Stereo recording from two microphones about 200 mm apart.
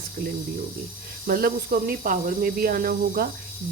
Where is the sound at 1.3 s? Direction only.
45° right (ahead or behind).